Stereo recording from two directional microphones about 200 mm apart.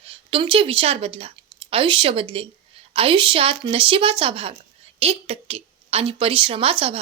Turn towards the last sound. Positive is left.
turn(degrees=-30)  # may be behind; listen again after turning